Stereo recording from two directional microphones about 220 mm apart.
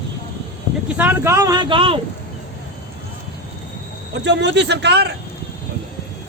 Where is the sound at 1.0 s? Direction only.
10° right (ahead or behind).